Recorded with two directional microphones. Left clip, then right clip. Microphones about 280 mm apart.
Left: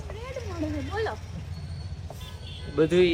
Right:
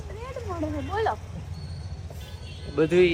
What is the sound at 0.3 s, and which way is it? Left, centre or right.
Speech, centre.